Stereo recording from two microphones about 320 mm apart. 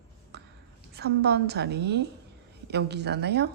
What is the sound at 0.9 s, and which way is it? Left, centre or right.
A woman's voice, right.